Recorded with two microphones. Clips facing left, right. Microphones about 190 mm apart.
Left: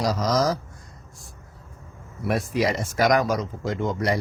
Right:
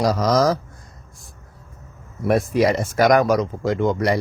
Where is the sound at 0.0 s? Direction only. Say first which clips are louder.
Right 5 dB; 60° right (ahead or behind).